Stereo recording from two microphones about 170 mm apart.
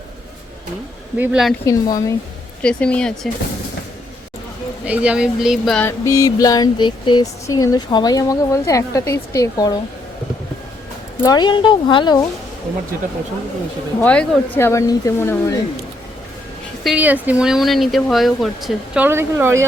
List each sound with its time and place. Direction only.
1.2 s speech: 5° right (ahead or behind)
1.6 s a sound: 20° left (ahead or behind)
2.6 s speech: 5° left (ahead or behind)
4.9 s speech: 5° right (ahead or behind)
5.8 s a sound: 15° left (ahead or behind)
11.2 s a sound: 25° left (ahead or behind)
14.0 s speech: 10° left (ahead or behind)
16.8 s speech: 5° right (ahead or behind)
19.0 s speech: 15° right (ahead or behind)